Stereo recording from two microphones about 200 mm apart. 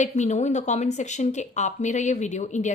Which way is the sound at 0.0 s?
35° left (ahead or behind).